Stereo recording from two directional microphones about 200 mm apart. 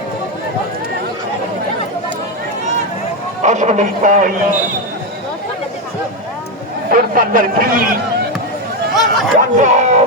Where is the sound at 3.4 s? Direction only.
35° right (ahead or behind).